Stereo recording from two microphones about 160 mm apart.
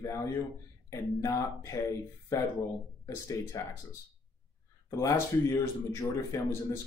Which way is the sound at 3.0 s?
20° left (ahead or behind).